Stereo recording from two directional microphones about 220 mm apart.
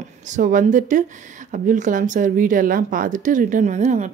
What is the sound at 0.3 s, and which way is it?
A woman's voice, 35° right (ahead or behind).